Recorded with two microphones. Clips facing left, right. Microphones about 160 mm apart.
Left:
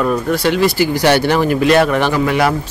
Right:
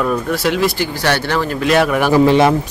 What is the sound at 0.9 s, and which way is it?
Speech, 15° left (ahead or behind).